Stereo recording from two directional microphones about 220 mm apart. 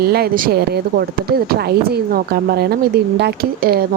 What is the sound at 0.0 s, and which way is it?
A woman's voice, 45° right (ahead or behind).